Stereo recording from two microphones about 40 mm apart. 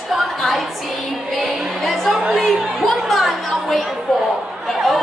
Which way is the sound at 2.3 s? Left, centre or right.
Centre.